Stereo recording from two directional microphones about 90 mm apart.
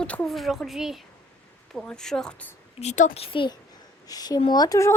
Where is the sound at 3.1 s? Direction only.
80° left.